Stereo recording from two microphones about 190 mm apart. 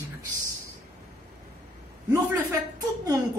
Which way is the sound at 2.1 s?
20° right (ahead or behind).